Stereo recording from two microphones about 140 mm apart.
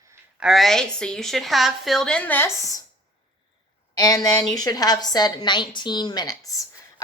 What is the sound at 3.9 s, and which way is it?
A woman's voice, 30° left (ahead or behind).